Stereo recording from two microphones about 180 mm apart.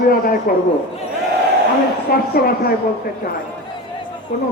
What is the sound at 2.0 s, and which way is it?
Speech, 55° left (ahead or behind).